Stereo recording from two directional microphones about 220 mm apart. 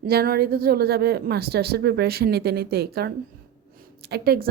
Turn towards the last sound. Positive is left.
turn(degrees=-45)  # may be behind; listen again after turning